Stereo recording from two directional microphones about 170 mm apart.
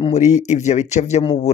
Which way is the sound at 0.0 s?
40° left (ahead or behind).